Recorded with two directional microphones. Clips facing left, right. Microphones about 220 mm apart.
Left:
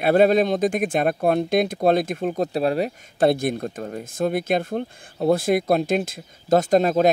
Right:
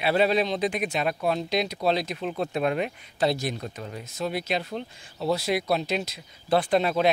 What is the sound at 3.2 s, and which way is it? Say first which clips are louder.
Speech: left 6 dB; 55° left (ahead or behind).